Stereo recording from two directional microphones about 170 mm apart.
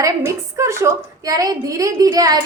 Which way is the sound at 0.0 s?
15° right (ahead or behind).